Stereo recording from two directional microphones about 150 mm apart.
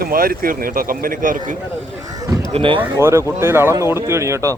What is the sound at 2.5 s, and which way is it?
Speech, 35° right (ahead or behind).